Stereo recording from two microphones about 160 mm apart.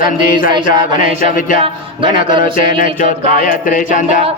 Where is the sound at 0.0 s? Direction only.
60° left (ahead or behind).